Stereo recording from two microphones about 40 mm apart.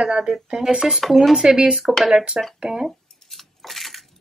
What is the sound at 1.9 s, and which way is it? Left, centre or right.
Speech, centre.